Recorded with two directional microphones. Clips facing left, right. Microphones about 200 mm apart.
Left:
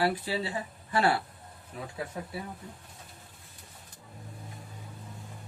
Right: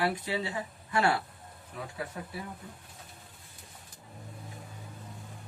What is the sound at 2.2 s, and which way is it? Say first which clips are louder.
Speech: left 3 dB; 25° left (ahead or behind).